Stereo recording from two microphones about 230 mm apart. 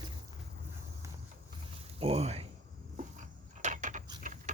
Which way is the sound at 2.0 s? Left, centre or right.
Right.